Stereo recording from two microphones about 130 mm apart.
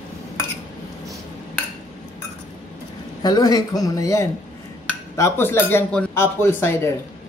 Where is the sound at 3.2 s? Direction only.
30° left (ahead or behind).